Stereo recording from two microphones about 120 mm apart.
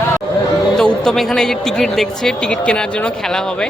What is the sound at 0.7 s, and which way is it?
Speech, 5° left (ahead or behind).